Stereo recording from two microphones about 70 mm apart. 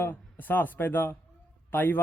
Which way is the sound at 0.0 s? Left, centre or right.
Left.